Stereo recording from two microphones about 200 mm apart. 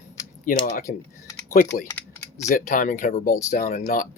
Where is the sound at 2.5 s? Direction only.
40° left (ahead or behind).